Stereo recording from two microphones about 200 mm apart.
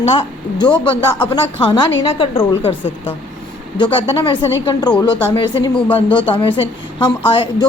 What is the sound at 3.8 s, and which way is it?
A woman's voice, 25° left (ahead or behind).